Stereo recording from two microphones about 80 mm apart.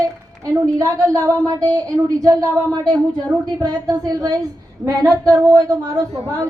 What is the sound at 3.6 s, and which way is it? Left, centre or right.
A woman's voice, right.